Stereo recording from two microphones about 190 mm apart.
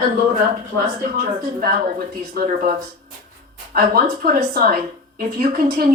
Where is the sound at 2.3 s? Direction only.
45° right (ahead or behind).